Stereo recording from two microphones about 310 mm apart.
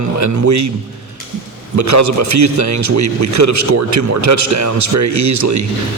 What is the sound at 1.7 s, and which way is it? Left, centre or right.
A man's voice, right.